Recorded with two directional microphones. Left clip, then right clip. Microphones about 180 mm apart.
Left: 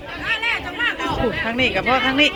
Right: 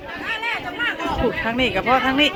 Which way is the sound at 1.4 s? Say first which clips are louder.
Left 1 dB; 10° right (ahead or behind).